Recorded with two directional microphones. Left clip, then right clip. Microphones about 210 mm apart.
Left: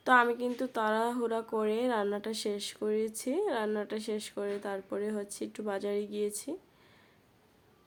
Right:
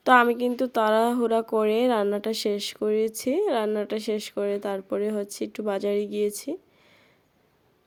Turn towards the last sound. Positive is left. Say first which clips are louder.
# right 8 dB
turn(degrees=-30)  # may be behind; listen again after turning